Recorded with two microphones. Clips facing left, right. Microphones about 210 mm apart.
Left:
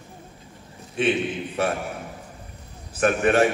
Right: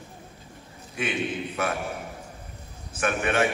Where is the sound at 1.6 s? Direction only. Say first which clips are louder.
Left 4 dB; 30° left (ahead or behind).